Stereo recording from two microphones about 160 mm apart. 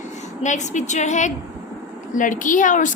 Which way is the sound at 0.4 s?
50° left (ahead or behind).